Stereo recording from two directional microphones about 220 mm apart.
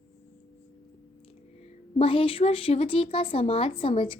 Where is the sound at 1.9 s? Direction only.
25° left (ahead or behind).